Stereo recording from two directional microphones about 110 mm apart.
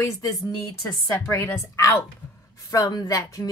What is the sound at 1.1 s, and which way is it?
Speech, 20° left (ahead or behind).